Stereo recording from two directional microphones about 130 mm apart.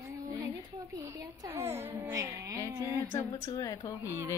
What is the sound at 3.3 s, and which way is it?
Speech, 30° left (ahead or behind).